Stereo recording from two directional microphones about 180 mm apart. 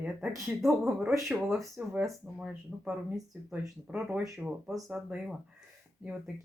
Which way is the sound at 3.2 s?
20° right (ahead or behind).